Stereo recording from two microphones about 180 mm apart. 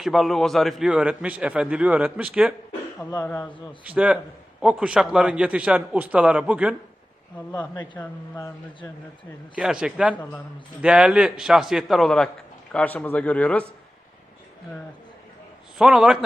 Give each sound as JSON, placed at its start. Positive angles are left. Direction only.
{"t": 0.0, "sound": "a man's voice", "side_deg": 0}
{"t": 3.2, "sound": "speech", "side_deg": 10}
{"t": 3.8, "sound": "a man's voice", "side_deg": -5}
{"t": 7.5, "sound": "speech", "side_deg": 25}
{"t": 7.9, "sound": "speech", "side_deg": 15}
{"t": 9.6, "sound": "a man's voice", "side_deg": -5}
{"t": 15.8, "sound": "a man's voice", "side_deg": -5}